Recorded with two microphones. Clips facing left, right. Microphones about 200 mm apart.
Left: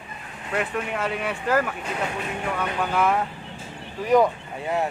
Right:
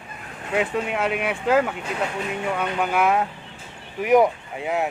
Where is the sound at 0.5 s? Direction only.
15° right (ahead or behind).